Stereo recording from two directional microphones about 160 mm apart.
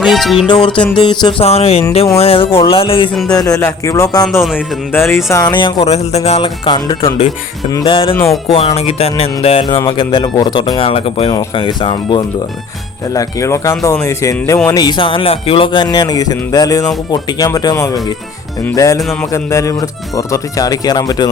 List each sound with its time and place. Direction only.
0.0 s music: centre (ahead or behind)
0.4 s speech: 30° left (ahead or behind)
3.3 s speech: 20° left (ahead or behind)
5.4 s speech: 30° left (ahead or behind)
13.1 s speech: 20° left (ahead or behind)